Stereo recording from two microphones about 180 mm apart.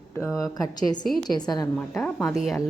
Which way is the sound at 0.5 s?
20° left (ahead or behind).